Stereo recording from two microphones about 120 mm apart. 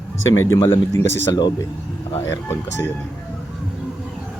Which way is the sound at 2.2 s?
25° left (ahead or behind).